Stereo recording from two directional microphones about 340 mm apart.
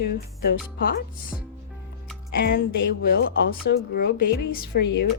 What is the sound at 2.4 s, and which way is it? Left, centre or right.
A woman's voice, left.